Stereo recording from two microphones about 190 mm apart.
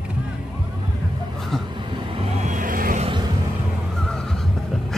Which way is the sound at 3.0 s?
25° right (ahead or behind).